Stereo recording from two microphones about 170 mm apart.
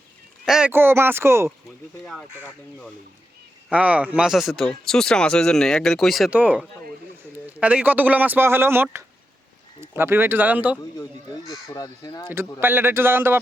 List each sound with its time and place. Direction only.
0.4 s speech: 5° right (ahead or behind)
0.7 s speech: 15° right (ahead or behind)
3.7 s speech: 10° right (ahead or behind)
11.7 s speech: 20° left (ahead or behind)
12.3 s speech: 15° right (ahead or behind)